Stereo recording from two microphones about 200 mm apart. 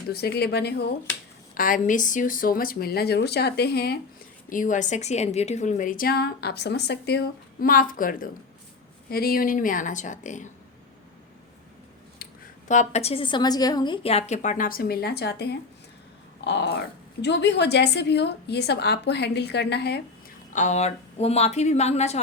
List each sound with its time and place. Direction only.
0.1 s a woman's voice: 50° left (ahead or behind)
1.5 s a woman's voice: 45° left (ahead or behind)
4.4 s a woman's voice: 40° left (ahead or behind)
12.2 s a woman's voice: 40° left (ahead or behind); by 20.0 s 55° left (ahead or behind)
20.5 s a woman's voice: 35° left (ahead or behind)